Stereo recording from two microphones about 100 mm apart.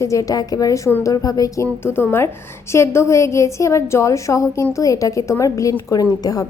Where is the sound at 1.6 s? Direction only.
25° left (ahead or behind).